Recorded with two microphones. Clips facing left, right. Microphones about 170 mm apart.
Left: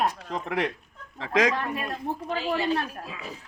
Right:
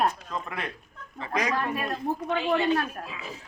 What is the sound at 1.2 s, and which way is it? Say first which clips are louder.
Speech: left 6 dB; 90° left.